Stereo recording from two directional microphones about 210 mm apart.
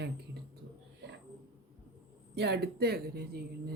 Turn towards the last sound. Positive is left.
turn(degrees=-50)  # may be behind; listen again after turning